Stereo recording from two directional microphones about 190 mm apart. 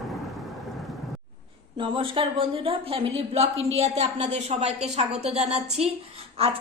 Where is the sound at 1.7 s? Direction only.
30° right (ahead or behind).